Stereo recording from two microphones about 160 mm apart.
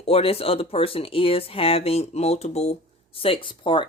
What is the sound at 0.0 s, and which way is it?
Speech, 40° left (ahead or behind).